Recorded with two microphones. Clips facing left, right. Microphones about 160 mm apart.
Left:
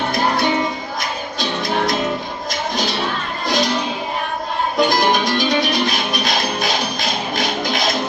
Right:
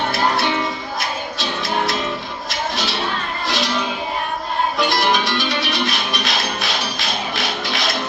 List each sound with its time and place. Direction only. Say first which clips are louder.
2.5 s music: left 2 dB; 45° left (ahead or behind)
4.8 s music: left 5 dB; 45° left (ahead or behind)